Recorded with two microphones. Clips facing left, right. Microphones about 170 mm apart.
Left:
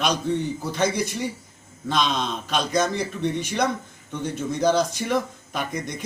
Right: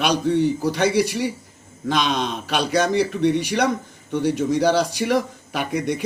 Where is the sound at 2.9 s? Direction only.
70° right (ahead or behind).